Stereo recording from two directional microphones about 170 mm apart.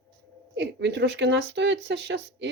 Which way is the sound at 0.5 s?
85° right.